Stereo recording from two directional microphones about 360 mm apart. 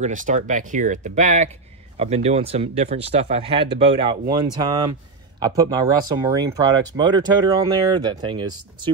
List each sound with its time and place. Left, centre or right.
0.0 s speech: right